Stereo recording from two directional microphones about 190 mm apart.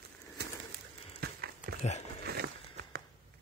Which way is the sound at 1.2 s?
55° right (ahead or behind).